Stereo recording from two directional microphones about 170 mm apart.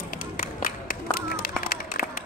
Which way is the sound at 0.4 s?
55° left (ahead or behind).